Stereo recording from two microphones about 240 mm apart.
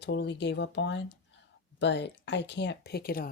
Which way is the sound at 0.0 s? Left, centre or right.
Left.